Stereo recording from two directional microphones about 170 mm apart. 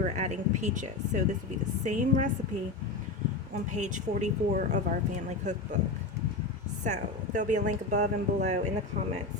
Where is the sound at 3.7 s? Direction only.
45° right (ahead or behind).